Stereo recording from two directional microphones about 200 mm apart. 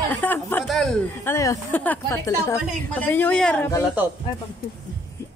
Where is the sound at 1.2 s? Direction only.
15° left (ahead or behind).